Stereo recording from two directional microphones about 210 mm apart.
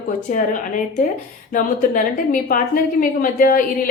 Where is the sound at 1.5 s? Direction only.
40° left (ahead or behind).